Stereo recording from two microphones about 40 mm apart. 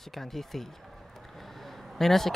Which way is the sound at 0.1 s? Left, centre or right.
Centre.